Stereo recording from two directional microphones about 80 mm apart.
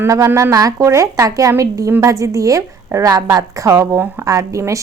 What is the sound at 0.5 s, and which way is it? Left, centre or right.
A woman's voice, right.